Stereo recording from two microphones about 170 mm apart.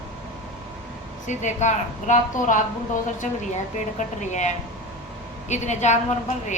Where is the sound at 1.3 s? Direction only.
45° left (ahead or behind).